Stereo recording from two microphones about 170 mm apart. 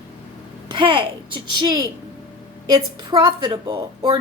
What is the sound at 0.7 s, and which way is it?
A woman's voice, 30° right (ahead or behind).